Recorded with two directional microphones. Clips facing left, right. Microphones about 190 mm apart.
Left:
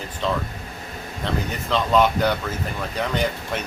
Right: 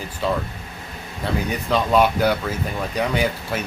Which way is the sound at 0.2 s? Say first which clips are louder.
Right 2 dB; 10° right (ahead or behind).